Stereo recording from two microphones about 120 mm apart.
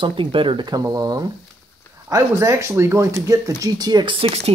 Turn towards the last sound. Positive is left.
turn(degrees=-55)  # may be behind; listen again after turning